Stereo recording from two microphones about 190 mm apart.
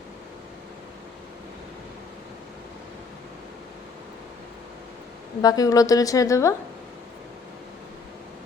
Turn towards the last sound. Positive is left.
turn(degrees=15)  # may be behind; listen again after turning